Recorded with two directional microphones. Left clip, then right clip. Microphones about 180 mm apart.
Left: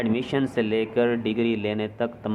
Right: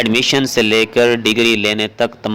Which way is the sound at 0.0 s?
45° right (ahead or behind).